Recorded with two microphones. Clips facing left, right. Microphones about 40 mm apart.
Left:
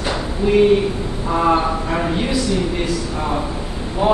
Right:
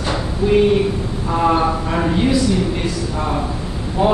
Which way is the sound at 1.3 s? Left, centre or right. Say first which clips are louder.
Even; centre.